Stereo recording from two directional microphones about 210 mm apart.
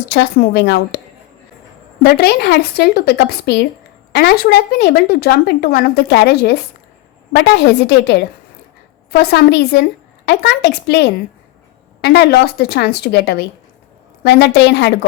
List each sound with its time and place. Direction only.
0.1 s speech: 55° left (ahead or behind)
2.0 s speech: 50° left (ahead or behind)